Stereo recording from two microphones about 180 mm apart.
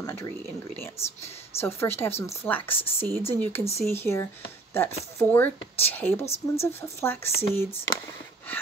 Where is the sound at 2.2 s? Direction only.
10° left (ahead or behind).